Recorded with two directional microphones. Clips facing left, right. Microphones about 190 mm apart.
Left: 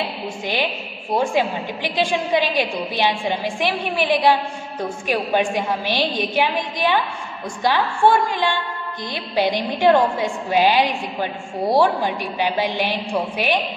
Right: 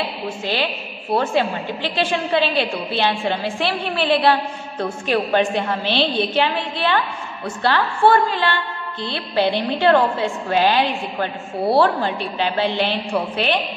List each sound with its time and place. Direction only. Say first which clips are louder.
1.1 s a woman's voice: even; 15° left (ahead or behind)